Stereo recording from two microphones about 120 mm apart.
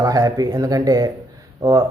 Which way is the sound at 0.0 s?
30° right (ahead or behind).